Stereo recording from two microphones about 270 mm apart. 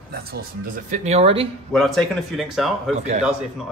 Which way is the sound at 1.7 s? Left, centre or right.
Centre.